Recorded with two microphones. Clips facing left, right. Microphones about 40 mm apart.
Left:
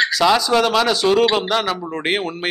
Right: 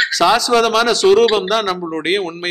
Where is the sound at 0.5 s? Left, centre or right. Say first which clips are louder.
Right 2 dB; centre.